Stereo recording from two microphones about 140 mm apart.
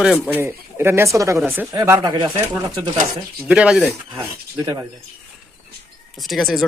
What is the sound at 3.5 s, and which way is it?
Speech, 5° right (ahead or behind).